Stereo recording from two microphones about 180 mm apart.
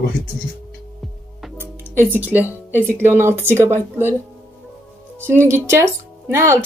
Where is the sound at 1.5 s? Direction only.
10° right (ahead or behind).